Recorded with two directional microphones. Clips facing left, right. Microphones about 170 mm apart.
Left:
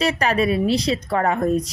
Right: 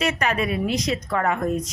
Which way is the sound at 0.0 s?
35° left (ahead or behind).